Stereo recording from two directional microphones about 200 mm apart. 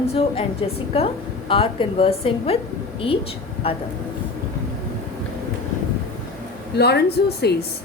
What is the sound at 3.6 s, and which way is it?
Speech, 30° left (ahead or behind).